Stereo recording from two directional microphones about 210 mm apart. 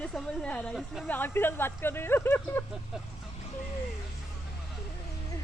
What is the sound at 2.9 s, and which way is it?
Speech, 5° right (ahead or behind).